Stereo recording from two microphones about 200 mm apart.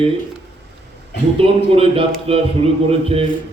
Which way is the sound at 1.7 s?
30° right (ahead or behind).